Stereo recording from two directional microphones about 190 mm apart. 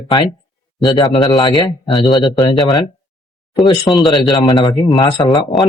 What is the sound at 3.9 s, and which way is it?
A man's voice, 20° left (ahead or behind).